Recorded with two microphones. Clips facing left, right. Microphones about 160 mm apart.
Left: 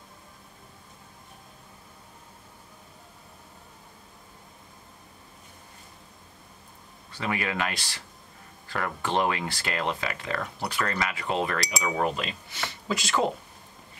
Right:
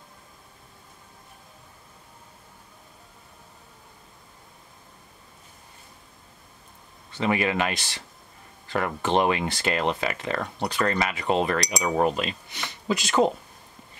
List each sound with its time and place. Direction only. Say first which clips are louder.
7.1 s speech: right 6 dB; 25° right (ahead or behind)